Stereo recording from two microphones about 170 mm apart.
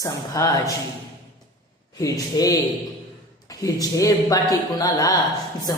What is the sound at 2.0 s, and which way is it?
Speech, 20° left (ahead or behind).